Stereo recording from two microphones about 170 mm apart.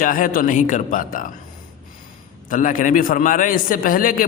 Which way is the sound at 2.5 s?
50° left (ahead or behind).